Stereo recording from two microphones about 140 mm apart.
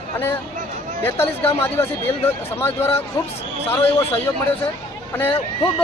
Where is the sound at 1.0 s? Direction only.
15° left (ahead or behind).